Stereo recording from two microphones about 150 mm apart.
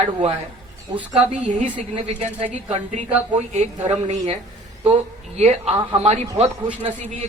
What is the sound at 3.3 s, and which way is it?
A man's voice, 50° right (ahead or behind).